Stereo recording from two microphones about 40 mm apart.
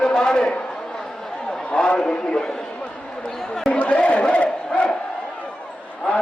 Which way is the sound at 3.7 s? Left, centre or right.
Left.